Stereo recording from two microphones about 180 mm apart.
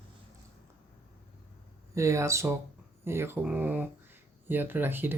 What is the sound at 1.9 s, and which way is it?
Speech, 15° right (ahead or behind).